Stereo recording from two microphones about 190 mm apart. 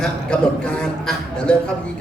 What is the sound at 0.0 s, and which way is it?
A man's voice, 5° left (ahead or behind).